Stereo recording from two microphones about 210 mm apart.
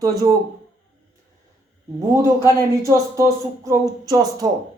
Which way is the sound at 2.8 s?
15° right (ahead or behind).